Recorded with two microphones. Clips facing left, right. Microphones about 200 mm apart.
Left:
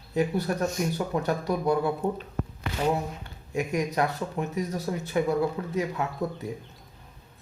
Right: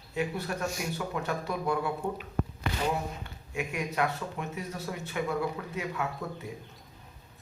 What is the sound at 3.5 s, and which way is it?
Speech, 40° left (ahead or behind).